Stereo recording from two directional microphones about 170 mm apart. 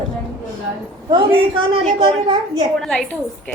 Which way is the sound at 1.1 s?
30° right (ahead or behind).